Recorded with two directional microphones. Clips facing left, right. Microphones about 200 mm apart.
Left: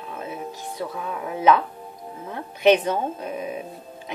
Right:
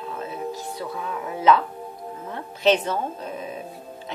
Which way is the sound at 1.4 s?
15° left (ahead or behind).